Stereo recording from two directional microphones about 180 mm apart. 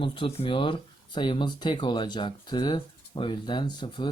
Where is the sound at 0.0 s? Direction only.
30° left (ahead or behind).